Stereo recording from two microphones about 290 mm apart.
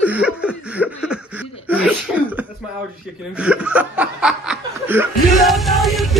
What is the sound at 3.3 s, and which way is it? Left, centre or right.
Chuckle, centre.